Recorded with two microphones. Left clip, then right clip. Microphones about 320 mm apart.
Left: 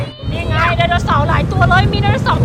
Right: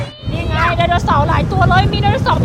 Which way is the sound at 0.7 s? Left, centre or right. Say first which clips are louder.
Right 1 dB; centre.